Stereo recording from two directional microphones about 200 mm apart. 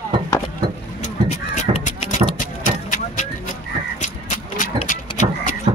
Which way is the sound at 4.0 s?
40° left (ahead or behind).